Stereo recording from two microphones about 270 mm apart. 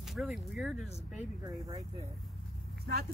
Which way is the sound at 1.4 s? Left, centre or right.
Centre.